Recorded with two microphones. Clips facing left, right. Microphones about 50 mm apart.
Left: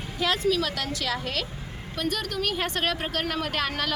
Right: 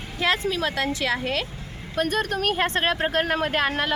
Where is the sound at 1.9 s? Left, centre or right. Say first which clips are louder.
Right 5 dB; right.